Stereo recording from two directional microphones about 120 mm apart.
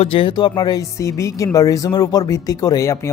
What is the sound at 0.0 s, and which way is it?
Speech, 50° left (ahead or behind).